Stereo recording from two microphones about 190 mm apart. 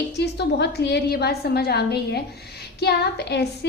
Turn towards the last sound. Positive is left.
turn(degrees=60)  # may be behind; listen again after turning